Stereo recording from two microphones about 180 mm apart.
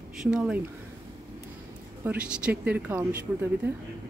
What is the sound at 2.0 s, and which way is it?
Speech, 5° right (ahead or behind).